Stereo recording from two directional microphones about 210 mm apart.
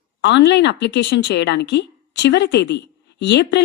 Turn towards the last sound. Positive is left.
turn(degrees=55)  # may be behind; listen again after turning